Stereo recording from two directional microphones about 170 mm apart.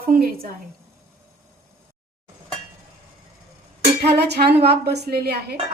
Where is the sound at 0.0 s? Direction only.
60° right (ahead or behind).